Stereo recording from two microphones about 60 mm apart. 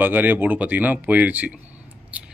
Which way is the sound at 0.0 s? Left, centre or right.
Right.